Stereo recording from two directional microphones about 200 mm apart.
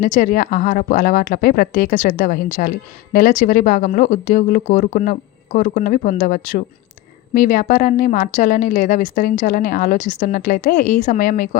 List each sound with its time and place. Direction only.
0.0 s a woman's voice: 40° left (ahead or behind)